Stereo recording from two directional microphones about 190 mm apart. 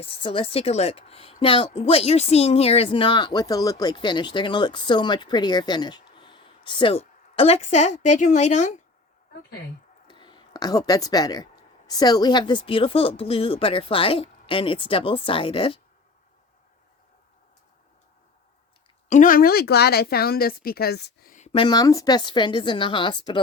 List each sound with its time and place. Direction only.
0.0 s a woman's voice: 30° left (ahead or behind)
10.1 s speech: 25° left (ahead or behind)
19.0 s a woman's voice: 40° left (ahead or behind); by 21.3 s 55° left (ahead or behind)
21.3 s a woman's voice: 30° left (ahead or behind)